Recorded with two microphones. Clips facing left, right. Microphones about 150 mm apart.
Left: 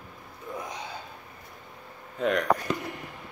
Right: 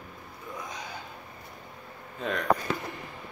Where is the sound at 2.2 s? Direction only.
85° left.